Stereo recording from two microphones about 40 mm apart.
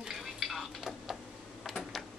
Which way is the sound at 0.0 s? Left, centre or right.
Centre.